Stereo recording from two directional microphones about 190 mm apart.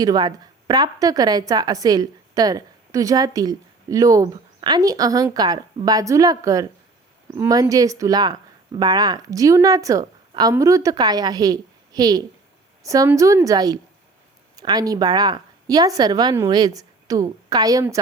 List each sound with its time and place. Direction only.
0.0 s a woman's voice: 20° right (ahead or behind)